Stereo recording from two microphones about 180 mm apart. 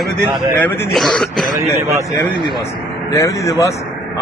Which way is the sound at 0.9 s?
5° left (ahead or behind).